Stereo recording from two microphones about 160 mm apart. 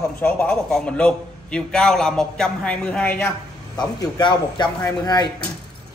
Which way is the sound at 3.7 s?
25° left (ahead or behind).